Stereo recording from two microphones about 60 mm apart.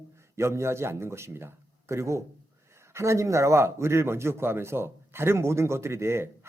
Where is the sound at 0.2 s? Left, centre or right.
Right.